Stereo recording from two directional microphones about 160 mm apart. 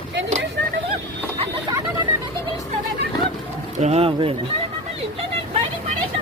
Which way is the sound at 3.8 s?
40° right (ahead or behind).